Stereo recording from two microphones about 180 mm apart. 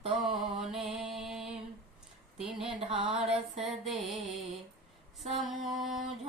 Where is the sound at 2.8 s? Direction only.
30° right (ahead or behind).